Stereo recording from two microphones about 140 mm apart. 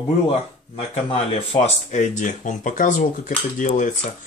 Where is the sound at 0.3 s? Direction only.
45° left (ahead or behind).